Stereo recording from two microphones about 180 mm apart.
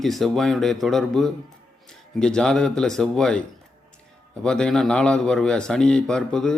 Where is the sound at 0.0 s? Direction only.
Centre (ahead or behind).